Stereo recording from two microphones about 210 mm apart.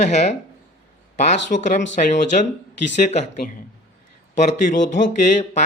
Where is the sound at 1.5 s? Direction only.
55° left (ahead or behind).